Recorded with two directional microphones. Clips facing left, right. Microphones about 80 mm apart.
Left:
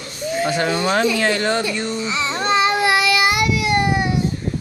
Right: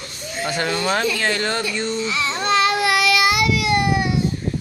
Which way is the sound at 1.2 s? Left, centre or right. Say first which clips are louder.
Left 3 dB; centre.